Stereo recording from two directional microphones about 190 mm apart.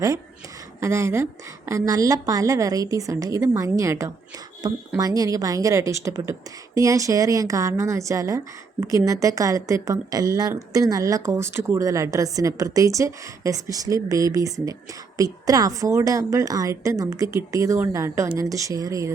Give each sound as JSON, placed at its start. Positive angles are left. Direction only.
{"t": 0.8, "sound": "speech", "side_deg": -15}